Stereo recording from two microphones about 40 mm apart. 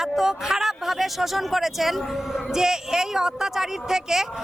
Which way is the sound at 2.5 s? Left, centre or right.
Centre.